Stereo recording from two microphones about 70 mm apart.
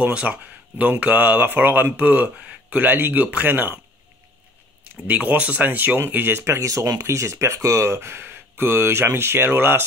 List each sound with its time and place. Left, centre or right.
0.0 s speech: centre
5.0 s speech: right